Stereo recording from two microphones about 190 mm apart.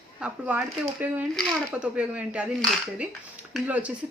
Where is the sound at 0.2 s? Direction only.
10° right (ahead or behind).